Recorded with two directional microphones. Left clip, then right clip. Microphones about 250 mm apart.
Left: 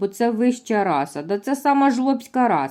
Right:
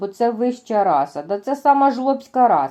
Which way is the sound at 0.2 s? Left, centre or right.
Centre.